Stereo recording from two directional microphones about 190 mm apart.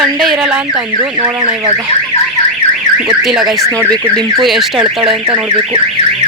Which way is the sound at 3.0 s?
5° right (ahead or behind).